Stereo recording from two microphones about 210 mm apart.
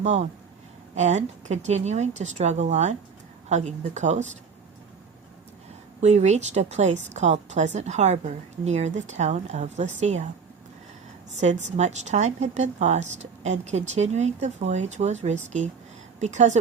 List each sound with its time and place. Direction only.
0.0 s a woman's voice: 35° right (ahead or behind)
6.0 s a woman's voice: 30° right (ahead or behind)
11.3 s a woman's voice: 35° right (ahead or behind)